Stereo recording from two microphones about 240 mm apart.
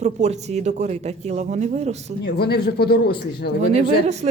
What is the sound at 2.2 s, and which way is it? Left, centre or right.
Speech, left.